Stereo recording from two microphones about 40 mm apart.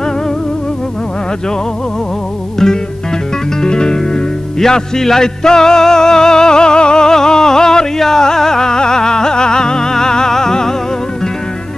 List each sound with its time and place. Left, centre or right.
2.6 s music: centre